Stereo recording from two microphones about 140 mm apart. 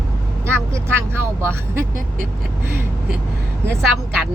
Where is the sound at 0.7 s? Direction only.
20° right (ahead or behind).